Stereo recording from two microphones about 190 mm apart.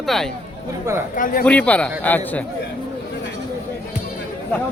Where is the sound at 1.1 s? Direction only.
45° left (ahead or behind).